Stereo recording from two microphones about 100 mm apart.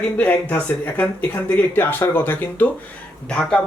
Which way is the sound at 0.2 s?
15° left (ahead or behind).